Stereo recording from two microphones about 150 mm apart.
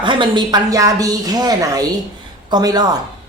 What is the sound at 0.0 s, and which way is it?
Speech, 35° right (ahead or behind).